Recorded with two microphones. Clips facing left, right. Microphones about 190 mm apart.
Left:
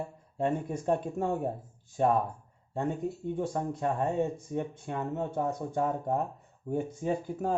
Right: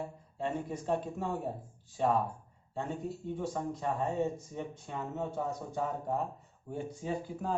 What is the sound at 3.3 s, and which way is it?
Speech, 55° left (ahead or behind).